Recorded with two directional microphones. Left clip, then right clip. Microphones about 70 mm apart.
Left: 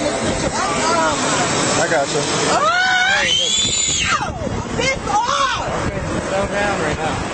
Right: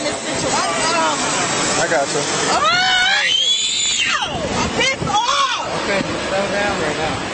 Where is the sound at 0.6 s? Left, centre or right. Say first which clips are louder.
Even; right.